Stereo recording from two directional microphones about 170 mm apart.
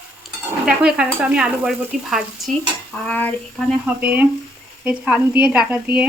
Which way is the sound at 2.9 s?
10° left (ahead or behind).